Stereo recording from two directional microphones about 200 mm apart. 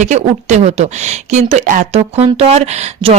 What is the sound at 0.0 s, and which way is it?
Speech, 35° right (ahead or behind).